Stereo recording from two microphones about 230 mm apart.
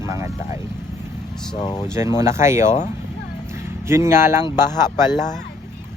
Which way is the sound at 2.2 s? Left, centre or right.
Centre.